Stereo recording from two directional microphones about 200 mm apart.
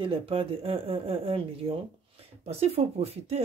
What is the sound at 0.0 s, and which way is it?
Speech, 25° right (ahead or behind).